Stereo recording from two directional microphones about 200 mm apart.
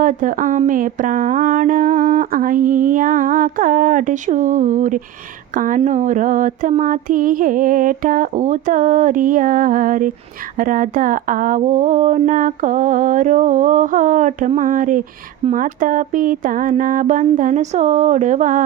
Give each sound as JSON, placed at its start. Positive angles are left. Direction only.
{"t": 0.0, "sound": "speech", "side_deg": -40}